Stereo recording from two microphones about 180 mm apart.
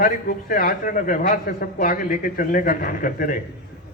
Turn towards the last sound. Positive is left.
turn(degrees=50)  # may be behind; listen again after turning